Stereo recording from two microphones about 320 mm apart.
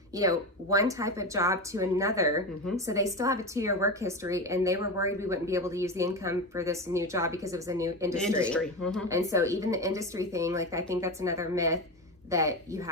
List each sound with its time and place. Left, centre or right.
0.2 s speech: centre
8.4 s speech: centre
9.0 s speech: centre